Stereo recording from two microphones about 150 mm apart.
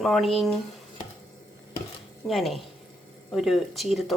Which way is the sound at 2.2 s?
Centre (ahead or behind).